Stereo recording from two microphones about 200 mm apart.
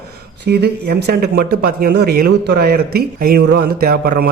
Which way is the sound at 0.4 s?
55° right (ahead or behind).